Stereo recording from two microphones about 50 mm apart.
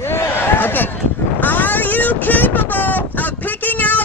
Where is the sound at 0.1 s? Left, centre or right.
Left.